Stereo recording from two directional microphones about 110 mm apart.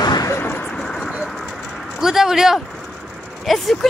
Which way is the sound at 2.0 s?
5° right (ahead or behind).